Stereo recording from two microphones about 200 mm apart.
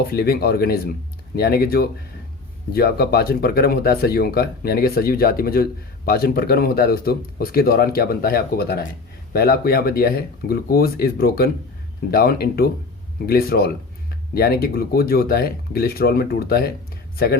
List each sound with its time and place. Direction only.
0.1 s speech: 50° left (ahead or behind)